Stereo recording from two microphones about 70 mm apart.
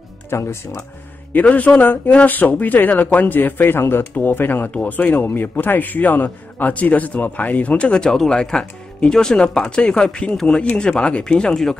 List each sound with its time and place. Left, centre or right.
0.3 s speech: left
1.3 s a man's voice: left